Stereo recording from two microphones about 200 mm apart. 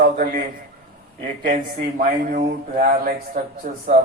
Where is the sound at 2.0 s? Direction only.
40° right (ahead or behind).